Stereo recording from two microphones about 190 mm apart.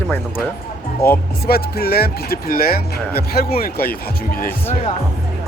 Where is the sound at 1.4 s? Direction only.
55° left (ahead or behind).